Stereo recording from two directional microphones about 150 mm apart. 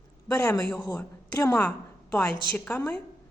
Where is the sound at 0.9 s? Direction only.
15° left (ahead or behind).